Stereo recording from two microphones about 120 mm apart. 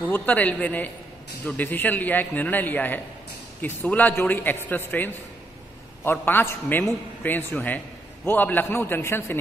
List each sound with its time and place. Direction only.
0.0 s a man's voice: 15° left (ahead or behind)